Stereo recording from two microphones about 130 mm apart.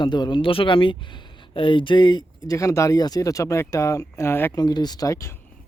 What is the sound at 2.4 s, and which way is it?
Speech, 25° left (ahead or behind).